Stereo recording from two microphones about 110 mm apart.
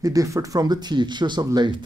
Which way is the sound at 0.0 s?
30° right (ahead or behind).